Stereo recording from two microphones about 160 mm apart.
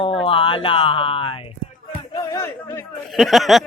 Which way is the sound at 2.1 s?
20° left (ahead or behind).